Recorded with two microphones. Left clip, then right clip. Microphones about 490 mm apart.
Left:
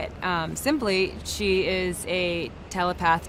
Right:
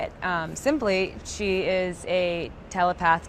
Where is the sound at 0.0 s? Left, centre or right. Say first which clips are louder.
Even; right.